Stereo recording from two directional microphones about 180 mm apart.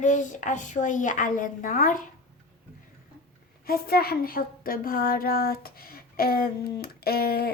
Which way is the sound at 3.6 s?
55° left (ahead or behind).